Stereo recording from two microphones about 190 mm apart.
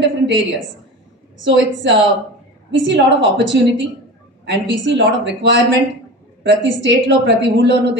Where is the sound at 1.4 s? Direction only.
70° right (ahead or behind).